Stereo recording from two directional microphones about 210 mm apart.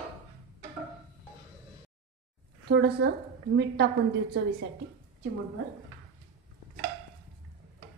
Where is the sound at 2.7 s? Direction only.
50° right (ahead or behind).